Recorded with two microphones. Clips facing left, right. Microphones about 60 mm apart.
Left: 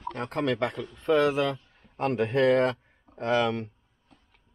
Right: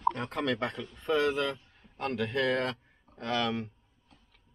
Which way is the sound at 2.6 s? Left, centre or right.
Left.